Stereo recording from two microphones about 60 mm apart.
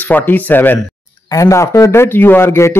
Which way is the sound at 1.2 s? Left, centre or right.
Left.